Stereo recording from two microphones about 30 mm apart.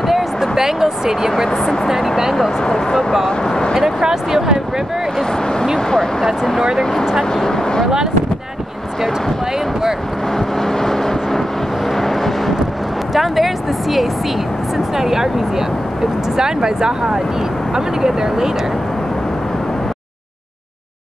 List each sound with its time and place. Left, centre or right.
0.0 s a sound: centre
1.9 s speech: centre
2.7 s speech: centre
4.0 s speech: centre
6.8 s speech: centre
10.6 s vehicle: centre
13.1 s speech: centre